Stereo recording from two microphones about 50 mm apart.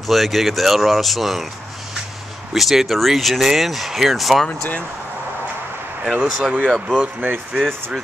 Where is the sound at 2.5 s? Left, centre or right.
Centre.